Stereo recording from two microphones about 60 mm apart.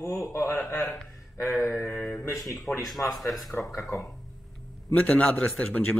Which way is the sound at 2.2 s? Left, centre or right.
Left.